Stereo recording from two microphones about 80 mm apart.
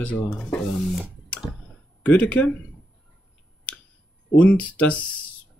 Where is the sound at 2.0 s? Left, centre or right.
Centre.